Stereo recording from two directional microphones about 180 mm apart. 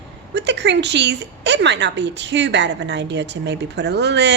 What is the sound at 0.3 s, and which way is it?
A woman's voice, 70° right (ahead or behind).